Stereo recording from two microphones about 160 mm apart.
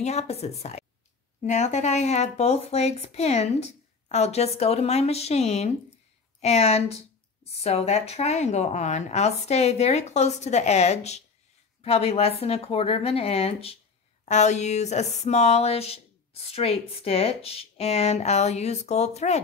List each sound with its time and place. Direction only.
0.0 s speech: 45° left (ahead or behind)